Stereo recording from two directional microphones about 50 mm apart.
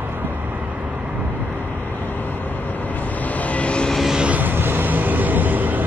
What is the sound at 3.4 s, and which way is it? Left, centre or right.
Vehicle, left.